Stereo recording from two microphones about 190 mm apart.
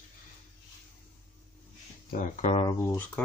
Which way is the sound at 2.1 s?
40° left (ahead or behind).